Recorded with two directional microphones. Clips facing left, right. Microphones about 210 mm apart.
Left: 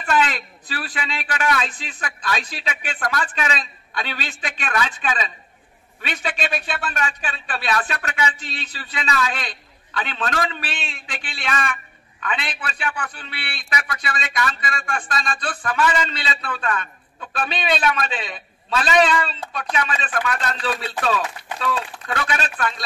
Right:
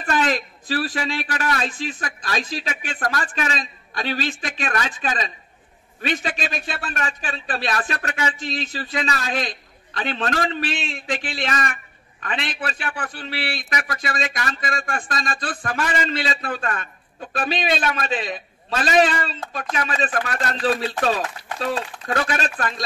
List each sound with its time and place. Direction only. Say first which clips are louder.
0.0 s a man's voice: even; 40° right (ahead or behind)